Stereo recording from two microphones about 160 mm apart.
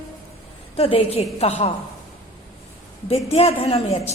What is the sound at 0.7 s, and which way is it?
Speech, 35° left (ahead or behind).